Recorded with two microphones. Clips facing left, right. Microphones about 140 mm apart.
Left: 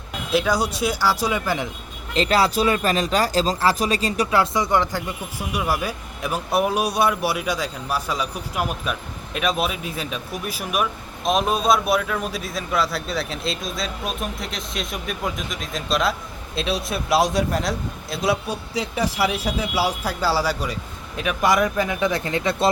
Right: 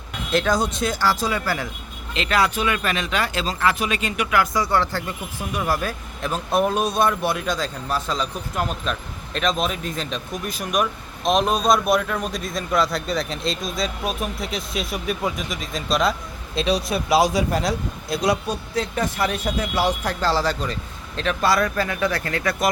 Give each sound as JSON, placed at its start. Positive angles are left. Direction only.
{"t": 0.3, "sound": "speech", "side_deg": 10}
{"t": 2.1, "sound": "speech", "side_deg": 35}